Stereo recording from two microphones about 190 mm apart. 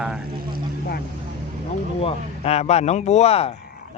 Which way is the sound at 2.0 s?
35° left (ahead or behind).